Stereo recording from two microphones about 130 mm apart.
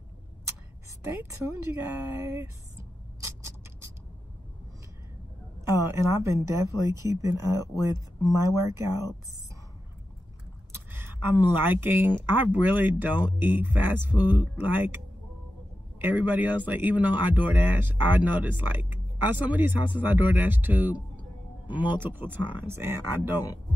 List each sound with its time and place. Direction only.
1.5 s speech: 20° right (ahead or behind)
5.8 s speech: 20° right (ahead or behind)
10.7 s speech: 15° right (ahead or behind)
16.0 s speech: 15° right (ahead or behind)